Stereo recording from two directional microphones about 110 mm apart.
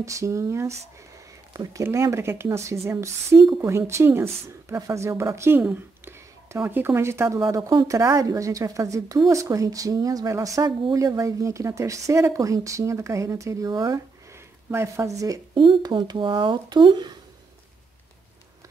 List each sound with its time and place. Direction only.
0.0 s a woman's voice: 25° right (ahead or behind)
15.5 s speech: 45° right (ahead or behind)